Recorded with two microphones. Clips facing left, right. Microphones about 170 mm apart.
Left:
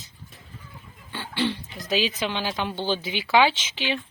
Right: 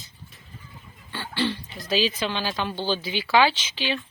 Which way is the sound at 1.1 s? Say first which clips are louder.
Even; 15° left (ahead or behind).